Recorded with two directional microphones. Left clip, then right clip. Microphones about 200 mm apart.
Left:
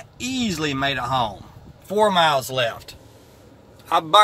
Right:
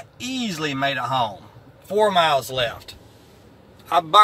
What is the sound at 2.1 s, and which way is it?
Speech, 15° left (ahead or behind).